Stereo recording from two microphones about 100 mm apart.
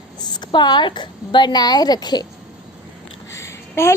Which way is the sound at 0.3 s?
45° left (ahead or behind).